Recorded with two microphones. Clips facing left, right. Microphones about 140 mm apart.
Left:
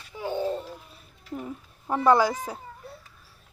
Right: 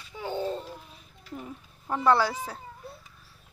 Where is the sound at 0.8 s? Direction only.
5° left (ahead or behind).